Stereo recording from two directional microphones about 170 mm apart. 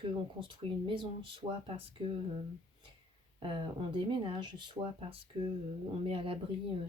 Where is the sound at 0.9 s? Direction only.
30° right (ahead or behind).